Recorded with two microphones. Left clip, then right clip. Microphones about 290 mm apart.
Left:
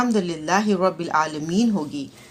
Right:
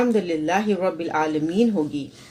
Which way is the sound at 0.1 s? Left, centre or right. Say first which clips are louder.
Even; left.